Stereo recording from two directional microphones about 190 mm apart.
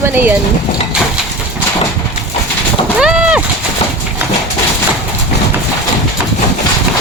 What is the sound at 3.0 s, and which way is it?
Vehicle, 5° right (ahead or behind).